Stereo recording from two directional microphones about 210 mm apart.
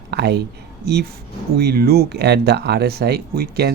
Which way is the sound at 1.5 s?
45° right (ahead or behind).